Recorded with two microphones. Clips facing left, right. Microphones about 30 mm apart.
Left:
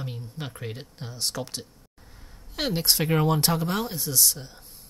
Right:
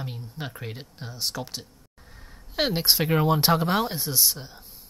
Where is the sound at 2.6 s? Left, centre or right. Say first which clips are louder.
Right 2 dB; centre.